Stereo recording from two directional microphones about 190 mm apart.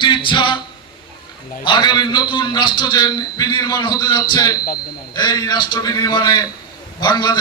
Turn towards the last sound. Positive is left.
turn(degrees=20)  # may be behind; listen again after turning